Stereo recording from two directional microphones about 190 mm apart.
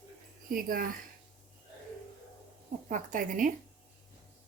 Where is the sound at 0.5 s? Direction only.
50° right (ahead or behind).